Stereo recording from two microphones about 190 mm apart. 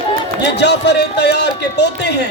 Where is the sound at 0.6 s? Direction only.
65° left (ahead or behind).